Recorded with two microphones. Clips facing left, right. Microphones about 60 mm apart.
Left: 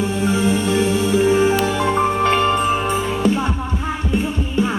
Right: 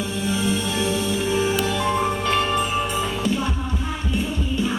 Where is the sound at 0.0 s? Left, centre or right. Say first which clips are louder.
Left 6 dB; left.